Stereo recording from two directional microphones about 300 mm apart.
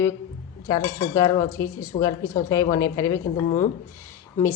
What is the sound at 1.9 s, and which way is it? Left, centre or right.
Speech, left.